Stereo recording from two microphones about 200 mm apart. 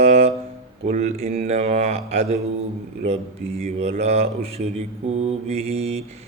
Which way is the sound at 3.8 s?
30° right (ahead or behind).